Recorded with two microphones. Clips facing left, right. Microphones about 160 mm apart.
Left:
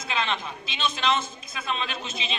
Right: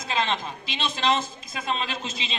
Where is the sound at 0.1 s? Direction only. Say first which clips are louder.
Right 2 dB; 35° right (ahead or behind).